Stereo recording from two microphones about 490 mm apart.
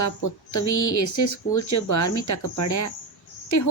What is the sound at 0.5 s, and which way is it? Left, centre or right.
Speech, left.